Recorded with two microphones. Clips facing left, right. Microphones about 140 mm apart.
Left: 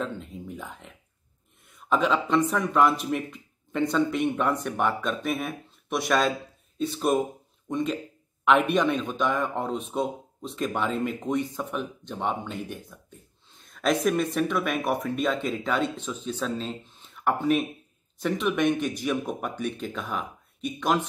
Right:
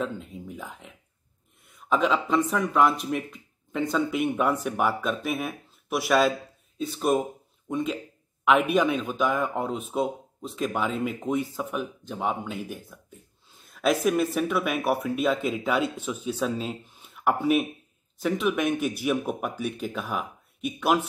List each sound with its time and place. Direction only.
0.0 s speech: centre (ahead or behind)